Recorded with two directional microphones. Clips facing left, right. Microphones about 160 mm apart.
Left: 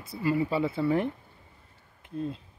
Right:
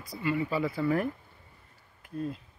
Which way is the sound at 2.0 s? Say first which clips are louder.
Left 2 dB; 25° left (ahead or behind).